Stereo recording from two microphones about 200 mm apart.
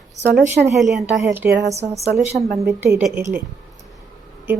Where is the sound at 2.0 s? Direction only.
30° right (ahead or behind).